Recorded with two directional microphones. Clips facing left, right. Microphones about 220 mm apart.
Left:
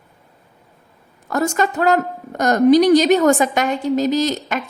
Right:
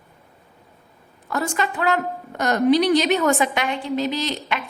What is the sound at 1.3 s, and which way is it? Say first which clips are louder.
A woman's voice: left 5 dB; 45° left (ahead or behind).